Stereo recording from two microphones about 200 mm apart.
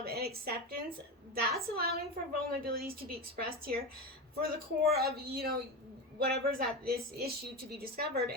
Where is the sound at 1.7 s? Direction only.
50° right (ahead or behind).